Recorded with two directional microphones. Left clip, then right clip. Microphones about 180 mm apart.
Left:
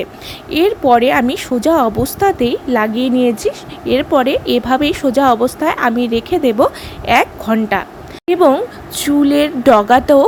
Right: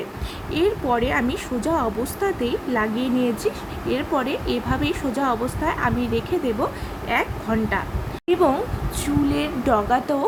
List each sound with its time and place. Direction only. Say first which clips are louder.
0.5 s a woman's voice: left 10 dB; 50° left (ahead or behind)
8.3 s a woman's voice: left 8 dB; 40° left (ahead or behind)